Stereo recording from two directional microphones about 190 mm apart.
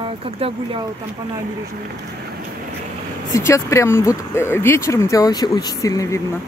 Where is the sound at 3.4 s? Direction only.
15° left (ahead or behind).